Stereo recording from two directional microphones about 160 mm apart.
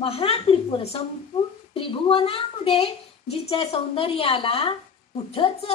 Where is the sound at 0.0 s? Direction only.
35° left (ahead or behind).